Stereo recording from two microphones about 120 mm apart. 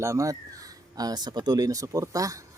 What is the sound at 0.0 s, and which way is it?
Speech, 25° right (ahead or behind).